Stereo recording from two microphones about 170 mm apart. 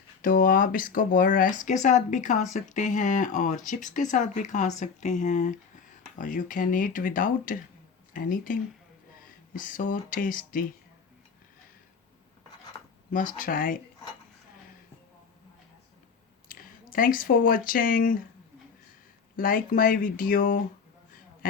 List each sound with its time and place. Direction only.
0.2 s speech: 55° left (ahead or behind)
13.1 s speech: 50° left (ahead or behind)
16.5 s speech: 55° left (ahead or behind)
19.4 s speech: 55° left (ahead or behind)